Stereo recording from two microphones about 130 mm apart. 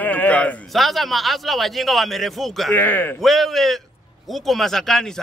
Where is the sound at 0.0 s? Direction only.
10° left (ahead or behind).